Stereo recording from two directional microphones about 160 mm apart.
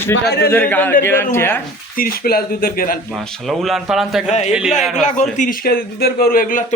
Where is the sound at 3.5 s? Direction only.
Centre (ahead or behind).